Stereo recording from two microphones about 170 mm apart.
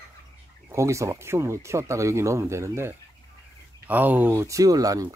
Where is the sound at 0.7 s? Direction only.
15° right (ahead or behind).